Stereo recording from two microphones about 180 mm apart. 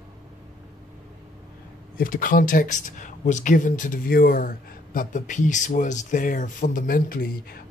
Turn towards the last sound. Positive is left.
turn(degrees=55)  # may be behind; listen again after turning